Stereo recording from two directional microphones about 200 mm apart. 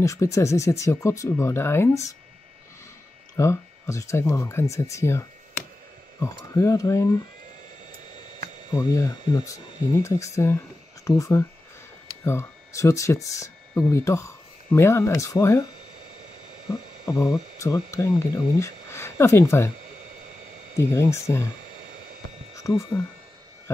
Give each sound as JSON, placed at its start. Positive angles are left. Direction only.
{"t": 0.0, "sound": "speech", "side_deg": 15}
{"t": 3.3, "sound": "speech", "side_deg": 15}
{"t": 8.6, "sound": "speech", "side_deg": 20}
{"t": 17.0, "sound": "speech", "side_deg": 20}
{"t": 20.7, "sound": "speech", "side_deg": 15}
{"t": 22.6, "sound": "speech", "side_deg": 15}